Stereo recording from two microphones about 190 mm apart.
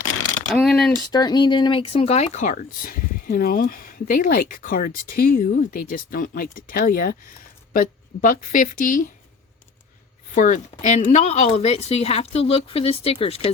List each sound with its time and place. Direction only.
0.5 s a sound: centre (ahead or behind)
1.1 s speech: 20° left (ahead or behind); by 9.0 s 45° left (ahead or behind)
10.3 s speech: 40° left (ahead or behind)